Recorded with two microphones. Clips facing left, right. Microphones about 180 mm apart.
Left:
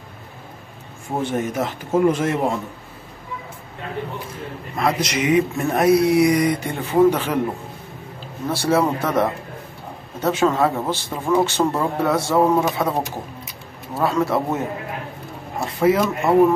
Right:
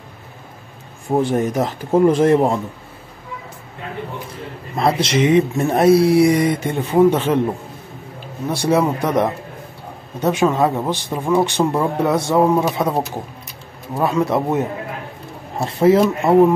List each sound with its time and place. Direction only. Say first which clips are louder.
1.2 s speech: right 1 dB; 35° right (ahead or behind)
4.7 s speech: right 4 dB; 30° right (ahead or behind)
8.5 s speech: right 2 dB; 15° right (ahead or behind)
13.9 s speech: right 2 dB; 15° right (ahead or behind)
15.6 s speech: right 4 dB; 30° right (ahead or behind)